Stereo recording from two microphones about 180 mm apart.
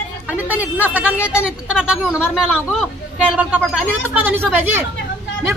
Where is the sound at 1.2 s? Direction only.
15° left (ahead or behind).